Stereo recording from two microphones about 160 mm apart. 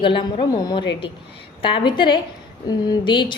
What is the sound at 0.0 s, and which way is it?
A woman's voice, 30° left (ahead or behind).